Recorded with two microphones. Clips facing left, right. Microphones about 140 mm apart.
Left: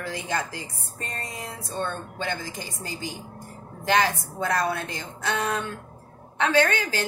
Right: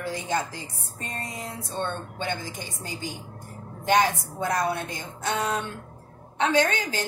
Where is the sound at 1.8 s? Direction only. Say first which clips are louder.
Even; 20° right (ahead or behind).